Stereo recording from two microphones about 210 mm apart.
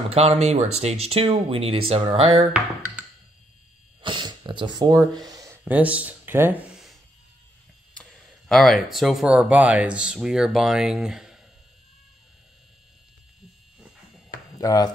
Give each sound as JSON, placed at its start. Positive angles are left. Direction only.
{"t": 0.1, "sound": "speech", "side_deg": -30}
{"t": 4.0, "sound": "a sound", "side_deg": -20}
{"t": 4.7, "sound": "speech", "side_deg": -20}
{"t": 14.6, "sound": "speech", "side_deg": 20}